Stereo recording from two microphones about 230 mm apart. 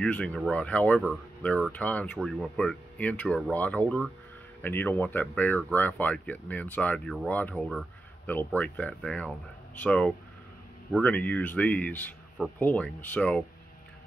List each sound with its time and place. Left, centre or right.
0.0 s speech: centre